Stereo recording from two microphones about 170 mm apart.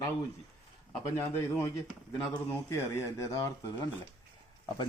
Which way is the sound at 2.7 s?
15° left (ahead or behind).